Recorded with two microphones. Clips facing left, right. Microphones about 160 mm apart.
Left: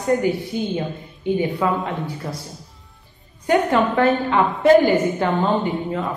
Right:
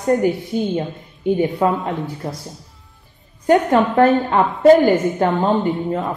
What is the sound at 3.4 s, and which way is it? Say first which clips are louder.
A woman's voice: right 3 dB; 45° right (ahead or behind).